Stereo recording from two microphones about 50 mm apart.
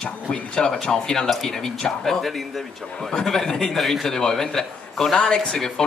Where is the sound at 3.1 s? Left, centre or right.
Centre.